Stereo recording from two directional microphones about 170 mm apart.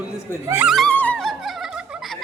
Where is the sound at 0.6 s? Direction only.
Centre (ahead or behind).